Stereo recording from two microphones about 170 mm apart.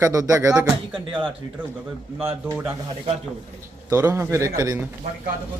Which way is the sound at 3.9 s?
15° right (ahead or behind).